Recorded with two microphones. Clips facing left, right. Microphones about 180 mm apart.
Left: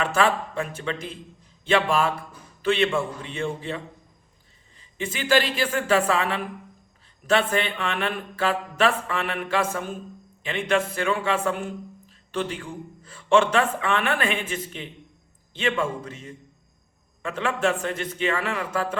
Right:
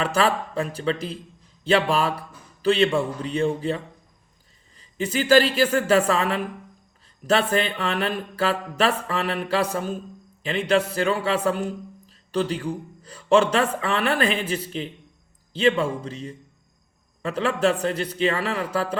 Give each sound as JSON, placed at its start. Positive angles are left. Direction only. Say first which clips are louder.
{"t": 0.0, "sound": "a man's voice", "louder": "even", "side_deg": -35}
{"t": 4.8, "sound": "a man's voice", "louder": "right 6 dB", "side_deg": -40}